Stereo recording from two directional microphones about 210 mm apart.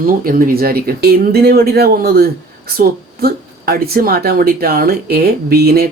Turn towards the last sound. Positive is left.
turn(degrees=-45)  # may be behind; listen again after turning